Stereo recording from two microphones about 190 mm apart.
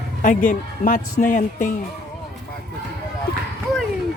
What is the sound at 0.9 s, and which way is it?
Speech, 45° left (ahead or behind).